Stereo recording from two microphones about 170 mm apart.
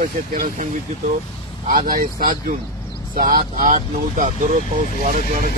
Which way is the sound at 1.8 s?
55° right (ahead or behind).